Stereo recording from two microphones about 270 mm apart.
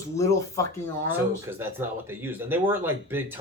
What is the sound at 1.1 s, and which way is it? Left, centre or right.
Speech, centre.